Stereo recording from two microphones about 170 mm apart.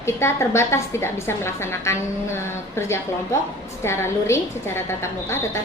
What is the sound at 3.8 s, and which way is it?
Speech, 15° left (ahead or behind).